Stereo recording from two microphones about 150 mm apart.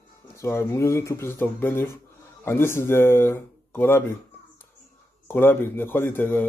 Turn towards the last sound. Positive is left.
turn(degrees=15)  # may be behind; listen again after turning